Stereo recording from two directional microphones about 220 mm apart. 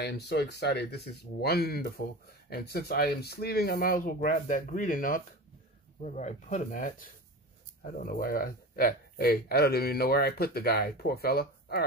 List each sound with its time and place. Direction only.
0.0 s speech: 50° left (ahead or behind)